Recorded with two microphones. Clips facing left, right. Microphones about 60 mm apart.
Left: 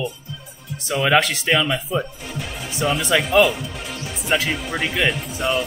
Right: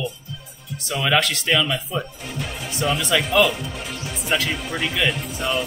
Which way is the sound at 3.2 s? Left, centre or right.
Centre.